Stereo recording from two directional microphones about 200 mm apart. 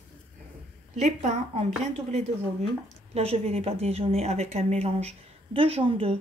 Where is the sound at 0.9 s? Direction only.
35° right (ahead or behind).